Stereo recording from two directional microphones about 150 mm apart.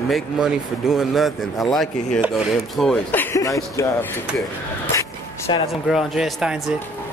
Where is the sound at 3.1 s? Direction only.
15° left (ahead or behind).